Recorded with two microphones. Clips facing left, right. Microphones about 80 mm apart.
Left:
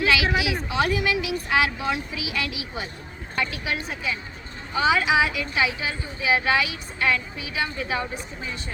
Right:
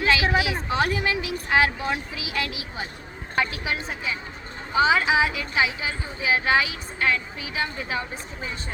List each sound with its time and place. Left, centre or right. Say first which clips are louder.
0.0 s speech: right 1 dB; right